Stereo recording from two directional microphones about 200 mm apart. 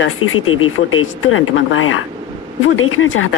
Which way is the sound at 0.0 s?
90° left.